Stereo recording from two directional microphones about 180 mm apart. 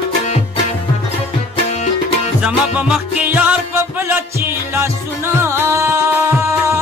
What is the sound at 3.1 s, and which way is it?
Music, 10° right (ahead or behind).